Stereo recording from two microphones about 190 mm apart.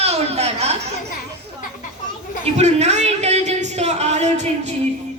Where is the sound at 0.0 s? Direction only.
35° right (ahead or behind).